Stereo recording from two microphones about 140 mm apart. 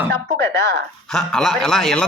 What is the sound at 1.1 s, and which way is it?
Speech, centre (ahead or behind).